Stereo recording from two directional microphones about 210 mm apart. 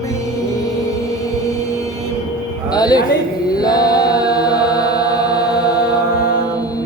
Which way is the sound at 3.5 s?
20° left (ahead or behind).